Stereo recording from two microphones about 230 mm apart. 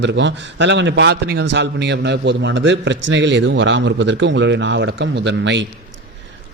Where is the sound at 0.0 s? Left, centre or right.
Right.